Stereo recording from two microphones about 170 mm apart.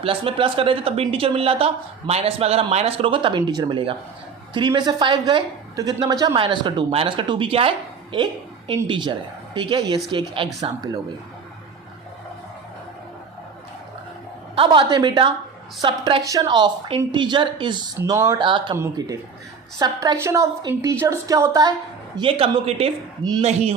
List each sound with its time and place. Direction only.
0.0 s a woman's voice: 35° right (ahead or behind)
14.5 s a woman's voice: 30° right (ahead or behind)
22.1 s speech: 30° right (ahead or behind)